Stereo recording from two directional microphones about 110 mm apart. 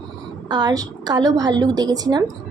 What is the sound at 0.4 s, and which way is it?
A woman's voice, 40° right (ahead or behind).